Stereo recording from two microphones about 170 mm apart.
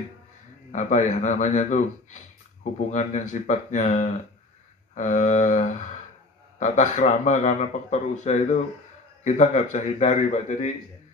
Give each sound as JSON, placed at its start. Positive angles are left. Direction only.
{"t": 0.7, "sound": "speech", "side_deg": 45}